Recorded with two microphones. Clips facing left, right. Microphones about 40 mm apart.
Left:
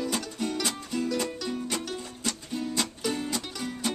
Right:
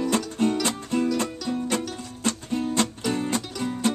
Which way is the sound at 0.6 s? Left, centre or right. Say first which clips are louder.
Right 6 dB; right.